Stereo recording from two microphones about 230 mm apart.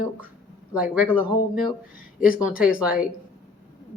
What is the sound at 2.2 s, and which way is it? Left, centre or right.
Speech, centre.